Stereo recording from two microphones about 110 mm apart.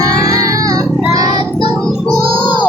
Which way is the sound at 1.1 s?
35° right (ahead or behind).